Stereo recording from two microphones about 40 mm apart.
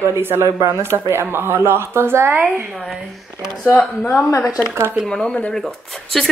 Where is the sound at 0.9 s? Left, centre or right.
Right.